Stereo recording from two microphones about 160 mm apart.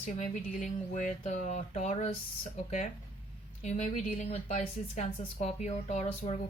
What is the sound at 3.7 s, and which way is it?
Speech, 50° left (ahead or behind).